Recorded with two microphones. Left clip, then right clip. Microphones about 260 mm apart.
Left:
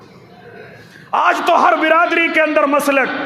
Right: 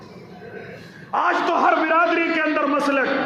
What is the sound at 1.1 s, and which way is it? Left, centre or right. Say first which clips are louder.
A man's voice: left 6 dB; left.